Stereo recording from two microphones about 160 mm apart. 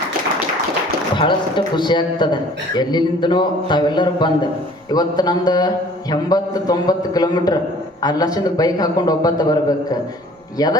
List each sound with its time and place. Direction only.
1.1 s a man's voice: 30° left (ahead or behind)